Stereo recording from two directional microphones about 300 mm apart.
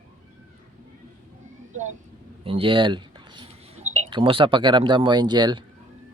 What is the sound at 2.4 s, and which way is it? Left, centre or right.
Speech, centre.